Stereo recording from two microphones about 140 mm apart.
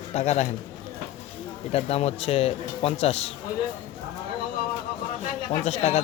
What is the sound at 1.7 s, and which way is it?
Speech, 45° left (ahead or behind).